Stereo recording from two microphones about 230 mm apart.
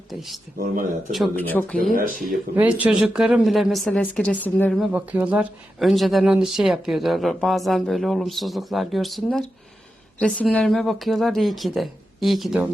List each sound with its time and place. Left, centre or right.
0.1 s speech: centre
1.8 s speech: right
2.6 s speech: centre